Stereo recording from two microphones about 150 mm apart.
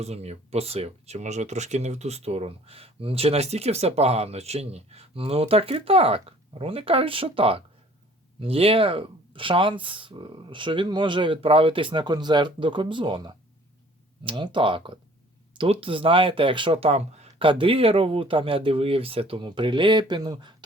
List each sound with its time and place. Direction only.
0.0 s speech: 45° right (ahead or behind); by 20.6 s 30° right (ahead or behind)